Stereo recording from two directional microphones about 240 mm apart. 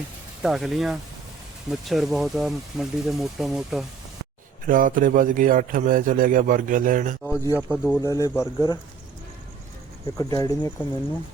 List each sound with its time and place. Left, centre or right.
0.4 s speech: centre
4.6 s a man's voice: right
7.5 s speech: centre
10.2 s speech: centre